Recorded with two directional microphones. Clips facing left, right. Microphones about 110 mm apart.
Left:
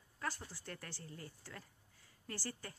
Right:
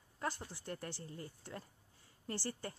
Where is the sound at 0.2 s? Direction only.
25° right (ahead or behind).